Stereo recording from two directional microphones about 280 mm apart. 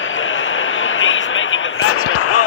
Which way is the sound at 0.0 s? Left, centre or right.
Left.